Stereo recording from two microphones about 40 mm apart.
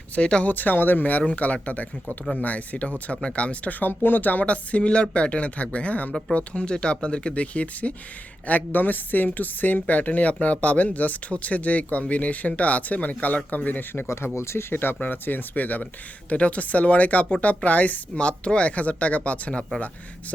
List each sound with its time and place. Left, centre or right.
0.2 s speech: left
0.4 s speech: left
1.3 s speech: left
8.4 s speech: left
14.5 s speech: left
15.0 s speech: left